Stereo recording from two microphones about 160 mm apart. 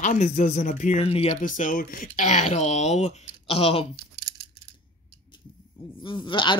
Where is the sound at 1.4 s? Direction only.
55° left (ahead or behind); by 3.8 s 35° left (ahead or behind).